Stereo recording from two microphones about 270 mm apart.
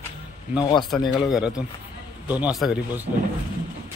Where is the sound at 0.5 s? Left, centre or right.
Centre.